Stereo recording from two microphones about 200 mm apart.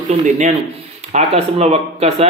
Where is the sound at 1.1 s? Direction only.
35° right (ahead or behind).